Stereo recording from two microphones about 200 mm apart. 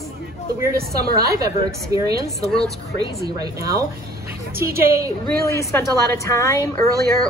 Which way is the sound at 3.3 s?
15° right (ahead or behind).